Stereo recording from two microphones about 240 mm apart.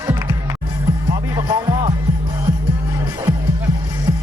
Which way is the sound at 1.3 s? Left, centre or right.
Centre.